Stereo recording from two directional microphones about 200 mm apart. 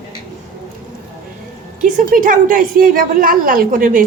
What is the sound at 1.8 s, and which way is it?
A woman's voice, 40° right (ahead or behind).